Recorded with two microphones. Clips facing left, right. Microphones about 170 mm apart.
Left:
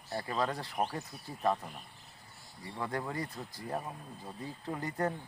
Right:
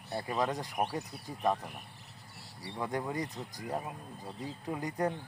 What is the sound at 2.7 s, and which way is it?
Speech, 15° right (ahead or behind).